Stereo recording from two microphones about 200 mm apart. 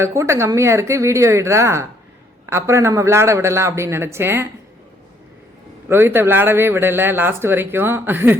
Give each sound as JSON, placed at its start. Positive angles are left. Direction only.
{"t": 0.0, "sound": "speech", "side_deg": -15}
{"t": 5.9, "sound": "speech", "side_deg": -10}